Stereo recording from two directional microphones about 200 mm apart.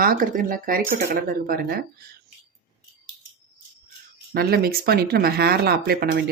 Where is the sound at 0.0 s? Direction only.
45° right (ahead or behind).